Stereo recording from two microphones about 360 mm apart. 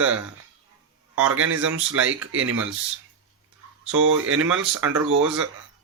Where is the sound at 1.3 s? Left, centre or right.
Right.